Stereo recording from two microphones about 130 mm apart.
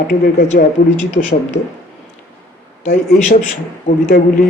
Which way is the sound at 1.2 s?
90° left.